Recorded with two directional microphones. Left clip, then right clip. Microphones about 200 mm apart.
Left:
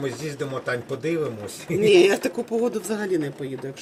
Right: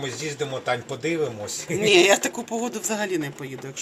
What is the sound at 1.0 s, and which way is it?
Speech, 30° right (ahead or behind).